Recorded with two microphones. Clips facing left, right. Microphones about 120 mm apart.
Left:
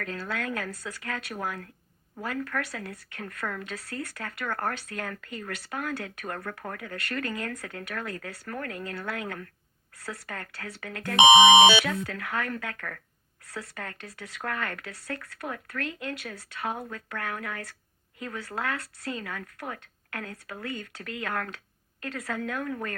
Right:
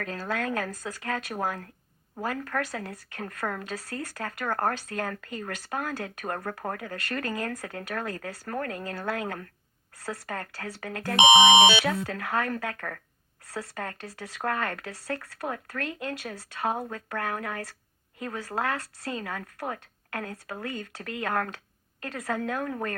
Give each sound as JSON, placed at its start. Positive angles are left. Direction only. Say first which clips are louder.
{"t": 0.0, "sound": "a woman's voice", "louder": "right 2 dB", "side_deg": -40}